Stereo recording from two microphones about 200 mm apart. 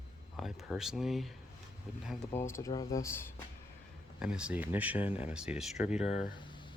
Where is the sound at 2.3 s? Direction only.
15° left (ahead or behind).